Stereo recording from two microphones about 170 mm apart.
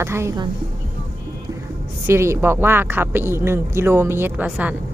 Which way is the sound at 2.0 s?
15° right (ahead or behind).